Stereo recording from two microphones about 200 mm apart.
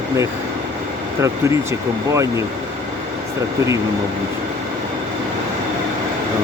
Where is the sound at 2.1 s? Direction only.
15° right (ahead or behind).